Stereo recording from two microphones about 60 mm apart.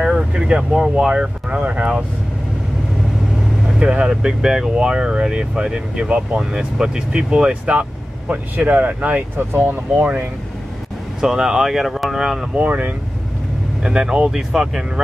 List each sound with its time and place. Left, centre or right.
0.3 s speech: centre
3.8 s speech: centre; by 10.2 s right
11.1 s speech: centre
12.5 s speech: right
13.8 s speech: centre